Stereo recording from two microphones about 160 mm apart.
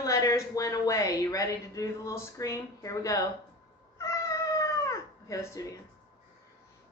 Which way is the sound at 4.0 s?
20° left (ahead or behind).